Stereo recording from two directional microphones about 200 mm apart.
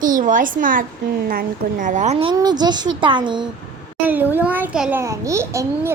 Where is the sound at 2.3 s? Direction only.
20° right (ahead or behind).